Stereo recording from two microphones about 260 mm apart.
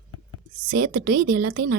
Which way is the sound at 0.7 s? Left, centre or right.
Right.